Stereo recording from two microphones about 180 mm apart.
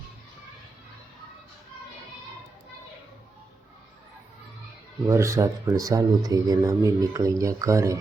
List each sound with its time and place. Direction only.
5.0 s speech: 15° right (ahead or behind)